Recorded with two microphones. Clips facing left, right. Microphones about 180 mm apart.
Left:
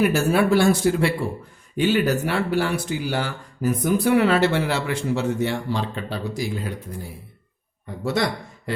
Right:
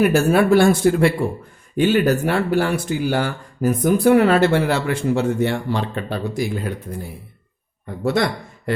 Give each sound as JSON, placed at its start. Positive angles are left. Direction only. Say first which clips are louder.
{"t": 0.0, "sound": "speech", "louder": "right 4 dB", "side_deg": -50}
{"t": 8.0, "sound": "speech", "louder": "right 4 dB", "side_deg": -55}